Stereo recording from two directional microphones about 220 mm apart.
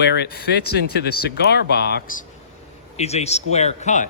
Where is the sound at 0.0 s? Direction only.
50° left (ahead or behind).